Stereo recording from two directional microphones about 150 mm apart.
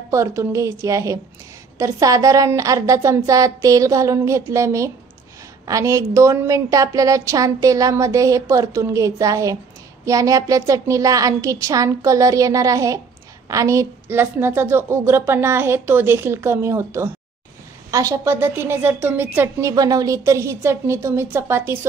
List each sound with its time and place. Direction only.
0.1 s a woman's voice: 20° right (ahead or behind)